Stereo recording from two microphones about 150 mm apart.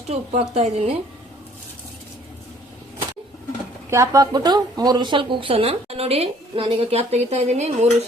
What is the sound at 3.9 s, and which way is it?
Speech, 20° right (ahead or behind).